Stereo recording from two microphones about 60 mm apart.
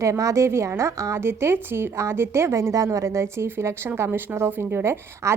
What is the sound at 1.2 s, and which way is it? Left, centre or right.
Speech, right.